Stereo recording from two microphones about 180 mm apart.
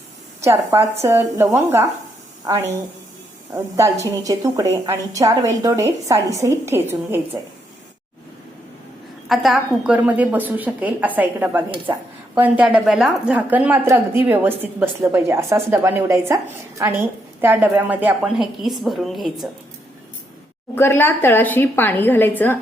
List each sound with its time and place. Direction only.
0.4 s a woman's voice: 15° right (ahead or behind)
9.3 s a woman's voice: centre (ahead or behind)
20.7 s a woman's voice: 15° left (ahead or behind)